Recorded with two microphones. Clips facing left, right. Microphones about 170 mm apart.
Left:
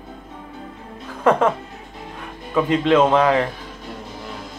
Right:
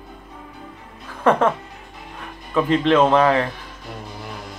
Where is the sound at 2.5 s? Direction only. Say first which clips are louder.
Even; 20° left (ahead or behind).